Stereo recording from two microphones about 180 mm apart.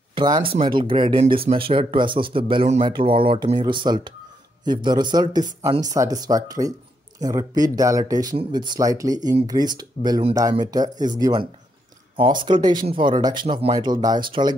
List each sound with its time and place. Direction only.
0.1 s speech: 25° right (ahead or behind)
12.4 s speech: 25° right (ahead or behind)